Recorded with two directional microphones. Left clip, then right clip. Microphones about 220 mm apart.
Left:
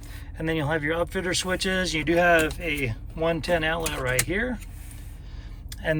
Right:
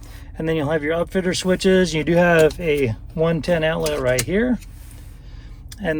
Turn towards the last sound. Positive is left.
turn(degrees=0)  # may be behind; listen again after turning